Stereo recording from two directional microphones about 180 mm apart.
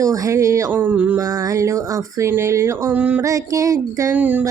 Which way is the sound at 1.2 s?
20° right (ahead or behind).